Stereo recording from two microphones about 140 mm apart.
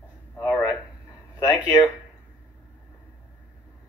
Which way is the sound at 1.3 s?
30° left (ahead or behind).